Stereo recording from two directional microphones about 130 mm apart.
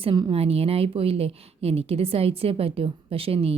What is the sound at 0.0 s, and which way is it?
A woman's voice, 45° right (ahead or behind).